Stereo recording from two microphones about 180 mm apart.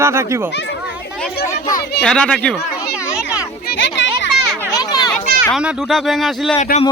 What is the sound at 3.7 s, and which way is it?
Children playing, 85° left.